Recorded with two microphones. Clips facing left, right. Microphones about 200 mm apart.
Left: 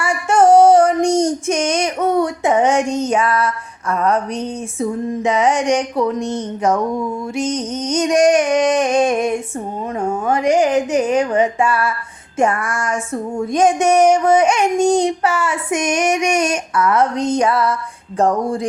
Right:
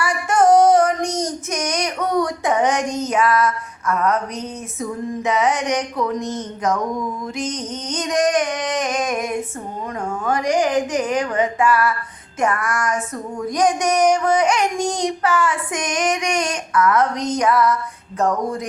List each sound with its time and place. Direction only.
0.0 s female singing: 25° left (ahead or behind)
18.2 s speech: 30° left (ahead or behind)